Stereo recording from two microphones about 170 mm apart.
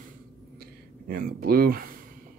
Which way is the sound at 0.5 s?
60° right (ahead or behind).